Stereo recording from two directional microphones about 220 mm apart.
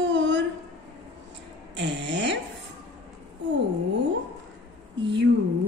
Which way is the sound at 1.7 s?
55° right (ahead or behind).